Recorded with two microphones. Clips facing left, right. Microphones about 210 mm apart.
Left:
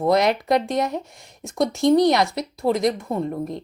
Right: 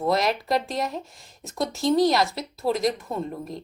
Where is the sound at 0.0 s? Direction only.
20° left (ahead or behind).